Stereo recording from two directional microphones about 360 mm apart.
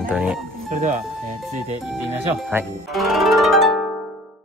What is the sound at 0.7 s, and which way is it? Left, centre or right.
Speech, centre.